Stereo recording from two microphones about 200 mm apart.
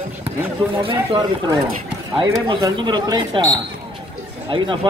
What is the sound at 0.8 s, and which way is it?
Speech, 25° right (ahead or behind).